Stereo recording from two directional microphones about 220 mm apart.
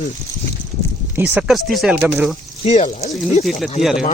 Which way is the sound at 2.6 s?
30° left (ahead or behind).